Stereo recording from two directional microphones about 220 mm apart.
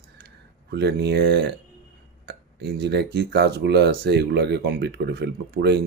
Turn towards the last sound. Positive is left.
turn(degrees=-50)  # may be behind; listen again after turning